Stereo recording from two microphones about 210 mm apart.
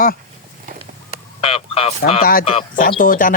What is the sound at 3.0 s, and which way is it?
Speech, 40° left (ahead or behind).